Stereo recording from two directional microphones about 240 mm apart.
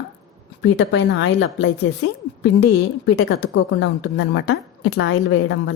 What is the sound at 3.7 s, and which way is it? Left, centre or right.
Speech, left.